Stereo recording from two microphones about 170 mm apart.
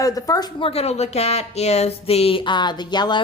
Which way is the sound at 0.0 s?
20° left (ahead or behind).